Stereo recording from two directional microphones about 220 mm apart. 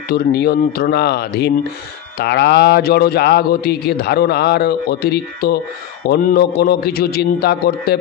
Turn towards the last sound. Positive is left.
turn(degrees=45)  # may be behind; listen again after turning